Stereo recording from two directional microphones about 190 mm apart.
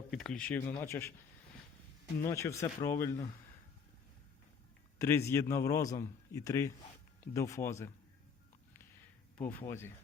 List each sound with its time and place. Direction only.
0.1 s a man's voice: 5° left (ahead or behind)
2.3 s a man's voice: 15° left (ahead or behind)
4.9 s a man's voice: 15° left (ahead or behind)
9.4 s a man's voice: 10° left (ahead or behind)